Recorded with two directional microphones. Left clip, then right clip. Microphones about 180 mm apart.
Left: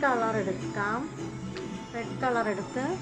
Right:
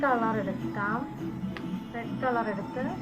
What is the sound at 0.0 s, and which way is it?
Speech, 30° left (ahead or behind).